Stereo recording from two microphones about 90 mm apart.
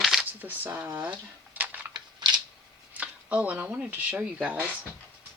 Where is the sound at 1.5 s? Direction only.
20° right (ahead or behind).